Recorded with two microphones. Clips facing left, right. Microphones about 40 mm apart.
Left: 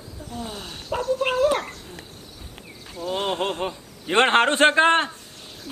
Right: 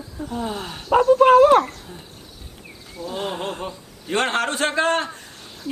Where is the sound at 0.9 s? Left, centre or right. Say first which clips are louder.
Right 11 dB; right.